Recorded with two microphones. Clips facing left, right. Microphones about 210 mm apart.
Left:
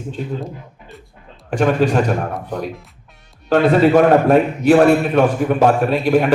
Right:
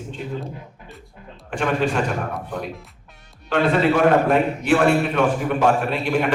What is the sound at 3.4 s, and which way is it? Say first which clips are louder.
A man's voice: left 6 dB; 40° left (ahead or behind).